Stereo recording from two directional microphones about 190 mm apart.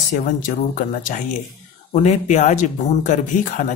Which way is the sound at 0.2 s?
45° left (ahead or behind).